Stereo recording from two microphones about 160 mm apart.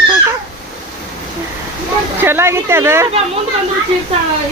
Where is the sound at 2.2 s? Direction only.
15° right (ahead or behind).